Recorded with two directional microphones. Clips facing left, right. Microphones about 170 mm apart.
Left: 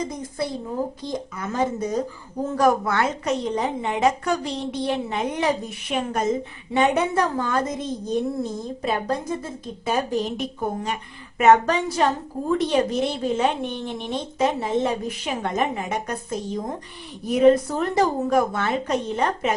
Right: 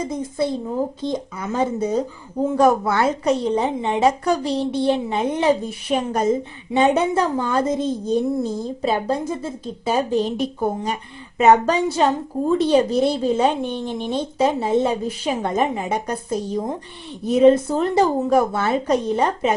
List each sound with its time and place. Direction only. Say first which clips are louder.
0.1 s a woman's voice: right 6 dB; 25° right (ahead or behind)
17.2 s a woman's voice: right 3 dB; 25° right (ahead or behind)